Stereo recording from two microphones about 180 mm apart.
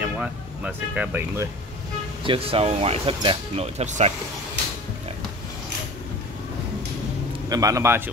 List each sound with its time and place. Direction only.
0.0 s speech: 10° right (ahead or behind)
2.2 s speech: 30° right (ahead or behind)
7.4 s a man's voice: 20° right (ahead or behind)